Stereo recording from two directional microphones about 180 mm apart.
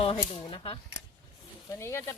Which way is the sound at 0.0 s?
30° left (ahead or behind).